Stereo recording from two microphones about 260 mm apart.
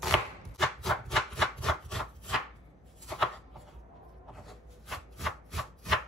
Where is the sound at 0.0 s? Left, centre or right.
Centre.